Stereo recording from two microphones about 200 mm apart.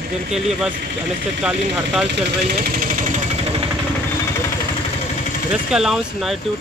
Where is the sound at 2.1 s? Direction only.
50° right (ahead or behind).